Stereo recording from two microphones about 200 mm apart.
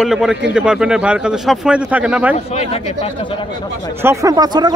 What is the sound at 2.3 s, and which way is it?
Speech, 30° left (ahead or behind).